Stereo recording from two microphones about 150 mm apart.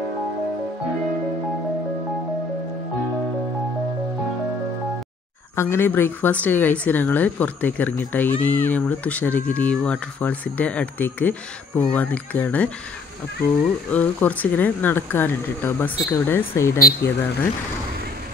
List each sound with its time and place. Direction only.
5.6 s speech: 15° left (ahead or behind)
13.9 s speech: 10° left (ahead or behind)
16.8 s speech: 90° left